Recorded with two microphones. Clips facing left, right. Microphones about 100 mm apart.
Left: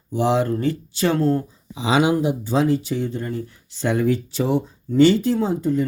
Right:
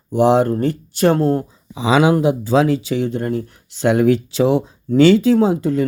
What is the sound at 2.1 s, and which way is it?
Speech, 90° right.